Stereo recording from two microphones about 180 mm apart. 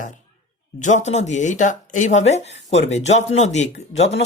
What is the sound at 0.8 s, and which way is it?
Speech, 40° left (ahead or behind).